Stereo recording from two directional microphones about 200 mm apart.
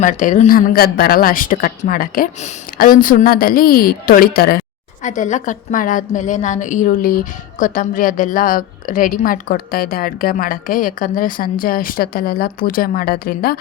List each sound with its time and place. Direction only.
0.0 s a woman's voice: 40° left (ahead or behind)
5.0 s a woman's voice: 40° left (ahead or behind)